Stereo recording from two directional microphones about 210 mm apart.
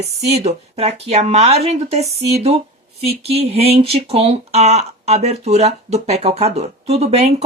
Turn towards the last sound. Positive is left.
turn(degrees=-30)  # may be behind; listen again after turning